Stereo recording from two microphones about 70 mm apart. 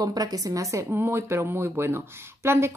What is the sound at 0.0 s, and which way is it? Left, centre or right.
Speech, right.